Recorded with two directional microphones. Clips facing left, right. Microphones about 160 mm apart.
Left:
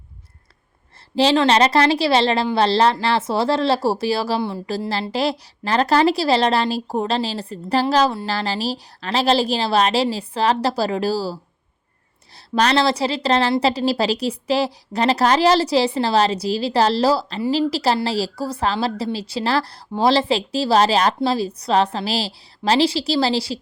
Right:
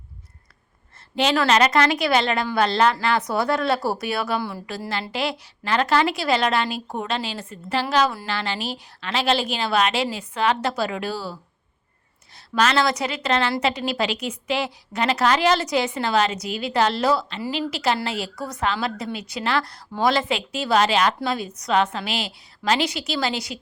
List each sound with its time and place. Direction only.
1.1 s a woman's voice: 30° left (ahead or behind)
12.5 s a woman's voice: 35° left (ahead or behind)